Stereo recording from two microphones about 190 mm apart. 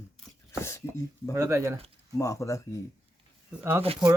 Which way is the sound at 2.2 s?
15° left (ahead or behind).